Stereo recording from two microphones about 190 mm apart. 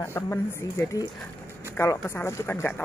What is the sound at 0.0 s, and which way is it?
Speech, 10° left (ahead or behind).